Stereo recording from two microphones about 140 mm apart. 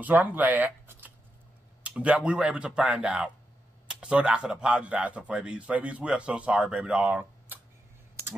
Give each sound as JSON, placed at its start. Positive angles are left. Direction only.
{"t": 0.0, "sound": "speech", "side_deg": -10}